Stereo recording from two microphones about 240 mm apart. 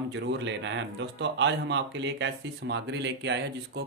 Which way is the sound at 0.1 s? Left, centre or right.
Right.